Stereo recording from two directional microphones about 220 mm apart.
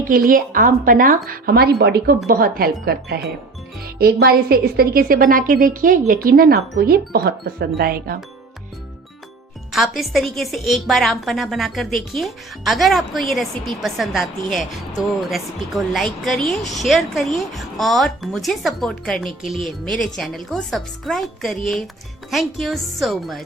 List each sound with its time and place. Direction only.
0.1 s a woman's voice: 40° right (ahead or behind)
9.7 s a woman's voice: centre (ahead or behind)